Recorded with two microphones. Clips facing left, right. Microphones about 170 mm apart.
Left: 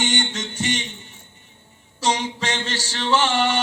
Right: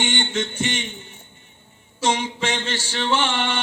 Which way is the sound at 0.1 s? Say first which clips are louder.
Right 1 dB; 40° left (ahead or behind).